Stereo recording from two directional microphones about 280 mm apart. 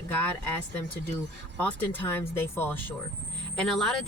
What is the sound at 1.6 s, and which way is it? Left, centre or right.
Speech, centre.